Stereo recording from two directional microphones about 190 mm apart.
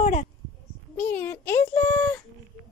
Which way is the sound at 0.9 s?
10° left (ahead or behind).